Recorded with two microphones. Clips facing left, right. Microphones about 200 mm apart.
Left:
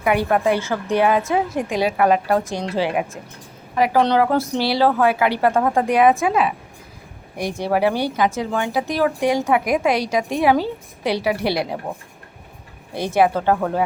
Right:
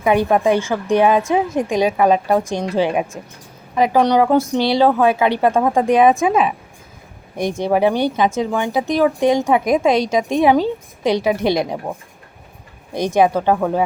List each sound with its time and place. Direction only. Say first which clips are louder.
0.0 s speech: right 3 dB; 20° right (ahead or behind)
12.9 s speech: right 2 dB; 15° right (ahead or behind)